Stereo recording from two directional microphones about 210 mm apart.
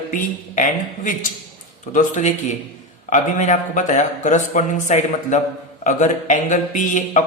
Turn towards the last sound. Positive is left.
turn(degrees=35)  # may be behind; listen again after turning